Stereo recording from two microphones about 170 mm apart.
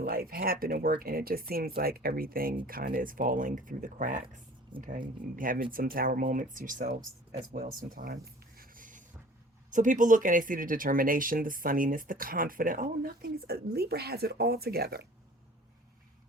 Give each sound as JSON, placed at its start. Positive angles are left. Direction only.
{"t": 0.0, "sound": "speech", "side_deg": -60}
{"t": 7.5, "sound": "a sound", "side_deg": -55}
{"t": 9.6, "sound": "speech", "side_deg": -50}